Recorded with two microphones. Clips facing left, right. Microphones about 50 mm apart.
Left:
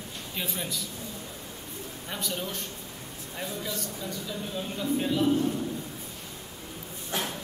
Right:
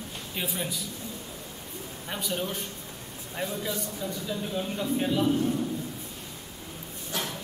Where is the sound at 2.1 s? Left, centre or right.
Centre.